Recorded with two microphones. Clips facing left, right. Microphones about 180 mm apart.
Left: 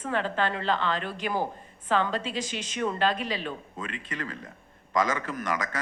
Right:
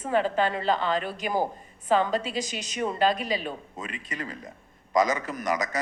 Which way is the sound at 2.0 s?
40° right (ahead or behind).